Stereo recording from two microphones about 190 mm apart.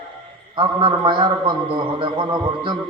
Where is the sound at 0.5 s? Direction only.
25° right (ahead or behind).